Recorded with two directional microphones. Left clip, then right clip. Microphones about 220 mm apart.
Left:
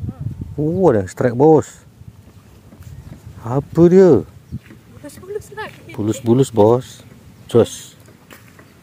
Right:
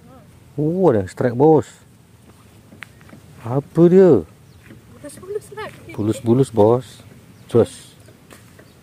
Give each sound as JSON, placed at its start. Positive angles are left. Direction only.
{"t": 0.6, "sound": "speech", "side_deg": 0}
{"t": 3.4, "sound": "speech", "side_deg": 0}
{"t": 5.6, "sound": "speech", "side_deg": 0}